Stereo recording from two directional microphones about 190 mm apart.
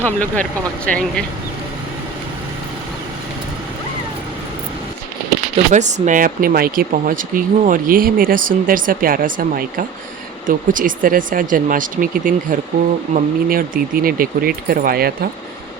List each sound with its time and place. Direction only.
0.0 s speech: 10° left (ahead or behind)
5.7 s speech: 40° right (ahead or behind)